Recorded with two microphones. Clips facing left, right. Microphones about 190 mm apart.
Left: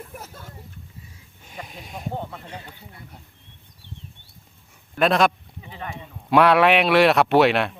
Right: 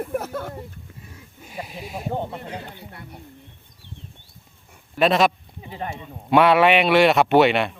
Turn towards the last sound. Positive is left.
turn(degrees=0)  # may be behind; listen again after turning